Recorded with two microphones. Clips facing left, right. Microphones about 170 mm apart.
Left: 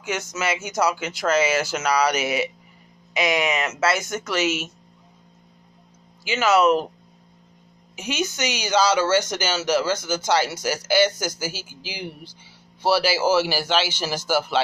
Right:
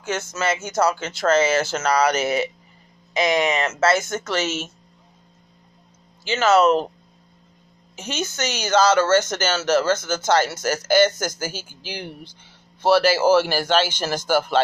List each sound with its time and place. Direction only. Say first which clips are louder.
0.0 s speech: right 2 dB; 10° left (ahead or behind)
3.1 s speech: right 2 dB; 35° right (ahead or behind)
3.7 s speech: right 3 dB; 10° left (ahead or behind)
6.2 s speech: right 2 dB; 10° left (ahead or behind)
7.9 s speech: left 2 dB; 10° left (ahead or behind)